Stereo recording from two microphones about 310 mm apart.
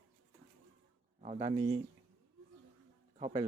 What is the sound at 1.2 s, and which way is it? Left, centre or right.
Speech, right.